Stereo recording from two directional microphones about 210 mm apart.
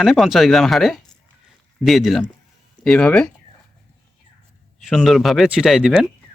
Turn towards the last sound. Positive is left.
turn(degrees=0)  # may be behind; listen again after turning